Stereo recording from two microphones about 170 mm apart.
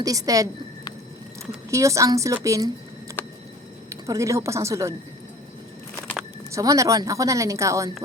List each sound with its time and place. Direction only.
0.0 s a woman's voice: 20° right (ahead or behind)
1.7 s a woman's voice: 20° right (ahead or behind)
4.0 s a woman's voice: 20° right (ahead or behind)
6.5 s a woman's voice: 20° right (ahead or behind)